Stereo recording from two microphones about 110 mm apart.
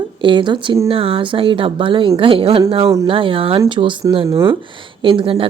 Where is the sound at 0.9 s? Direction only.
55° right (ahead or behind).